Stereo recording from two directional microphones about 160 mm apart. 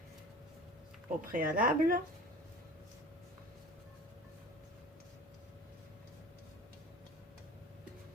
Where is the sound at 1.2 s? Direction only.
65° right (ahead or behind).